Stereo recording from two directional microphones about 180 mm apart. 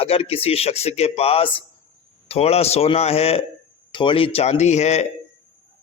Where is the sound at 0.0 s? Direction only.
35° left (ahead or behind).